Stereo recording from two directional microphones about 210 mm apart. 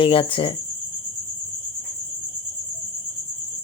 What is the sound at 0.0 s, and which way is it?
Speech, 25° left (ahead or behind).